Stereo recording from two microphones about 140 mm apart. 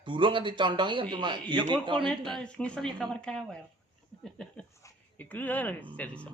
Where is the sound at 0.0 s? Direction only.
35° right (ahead or behind).